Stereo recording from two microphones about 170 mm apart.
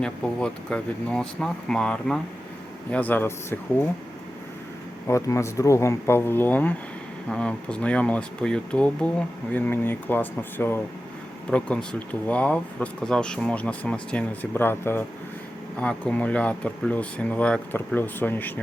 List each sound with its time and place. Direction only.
0.0 s speech: 5° left (ahead or behind)
5.0 s speech: 15° left (ahead or behind)